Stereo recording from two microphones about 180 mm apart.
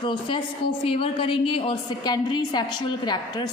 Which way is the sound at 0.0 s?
25° left (ahead or behind).